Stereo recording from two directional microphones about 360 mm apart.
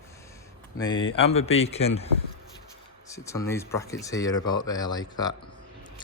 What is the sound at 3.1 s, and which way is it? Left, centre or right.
Speech, centre.